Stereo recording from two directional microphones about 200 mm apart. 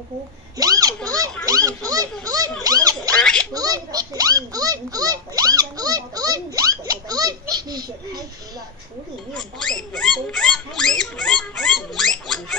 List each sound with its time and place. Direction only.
0.6 s a child's voice: 20° right (ahead or behind)
3.2 s a sound: 5° left (ahead or behind)
3.5 s a child's voice: 20° right (ahead or behind)
9.3 s rodents: 5° left (ahead or behind)